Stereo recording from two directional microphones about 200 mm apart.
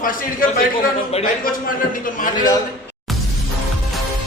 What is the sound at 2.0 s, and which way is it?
Speech, 40° left (ahead or behind).